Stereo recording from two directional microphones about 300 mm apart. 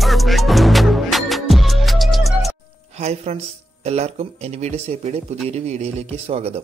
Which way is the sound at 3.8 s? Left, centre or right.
Right.